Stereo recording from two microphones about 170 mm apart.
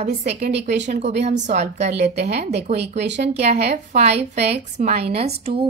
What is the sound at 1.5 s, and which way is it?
A woman's voice, 40° right (ahead or behind).